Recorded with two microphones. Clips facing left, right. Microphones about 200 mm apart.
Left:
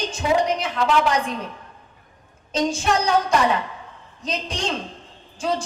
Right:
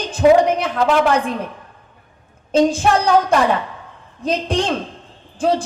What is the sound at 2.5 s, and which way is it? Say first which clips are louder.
A man's voice: right 7 dB; 55° right (ahead or behind).